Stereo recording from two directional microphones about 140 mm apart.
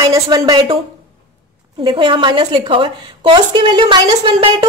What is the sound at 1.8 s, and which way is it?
A woman's voice, 35° right (ahead or behind).